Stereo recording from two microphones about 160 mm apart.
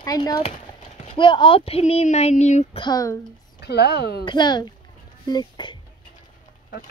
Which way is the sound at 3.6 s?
90° left.